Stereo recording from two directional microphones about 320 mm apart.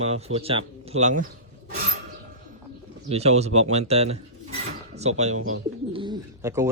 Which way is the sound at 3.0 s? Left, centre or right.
Centre.